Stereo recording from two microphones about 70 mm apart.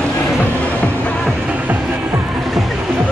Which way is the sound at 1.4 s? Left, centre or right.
Right.